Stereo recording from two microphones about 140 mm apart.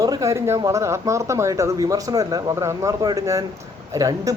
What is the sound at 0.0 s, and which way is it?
A man's voice, 25° right (ahead or behind).